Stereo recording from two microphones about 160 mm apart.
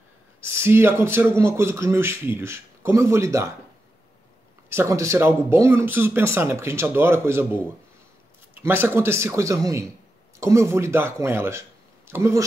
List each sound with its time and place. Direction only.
0.4 s speech: 15° right (ahead or behind)
4.6 s speech: 15° right (ahead or behind)